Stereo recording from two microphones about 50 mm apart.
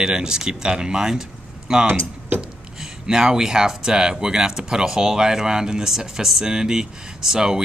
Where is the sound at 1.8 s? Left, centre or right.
Right.